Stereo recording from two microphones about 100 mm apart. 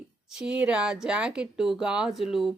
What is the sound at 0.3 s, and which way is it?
Speech, 5° right (ahead or behind).